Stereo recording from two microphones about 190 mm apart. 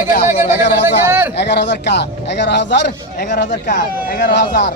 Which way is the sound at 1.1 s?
10° right (ahead or behind).